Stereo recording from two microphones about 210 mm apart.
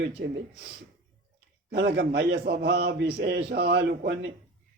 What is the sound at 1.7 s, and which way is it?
A man's voice, 50° right (ahead or behind).